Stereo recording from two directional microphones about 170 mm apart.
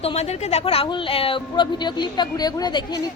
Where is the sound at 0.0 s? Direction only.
35° left (ahead or behind).